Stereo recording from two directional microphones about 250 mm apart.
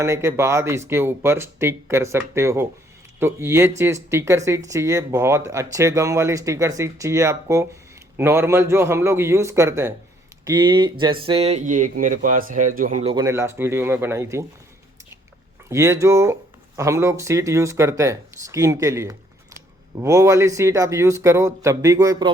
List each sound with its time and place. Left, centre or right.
0.0 s speech: centre; by 12.9 s right
13.0 s speech: centre
15.7 s speech: centre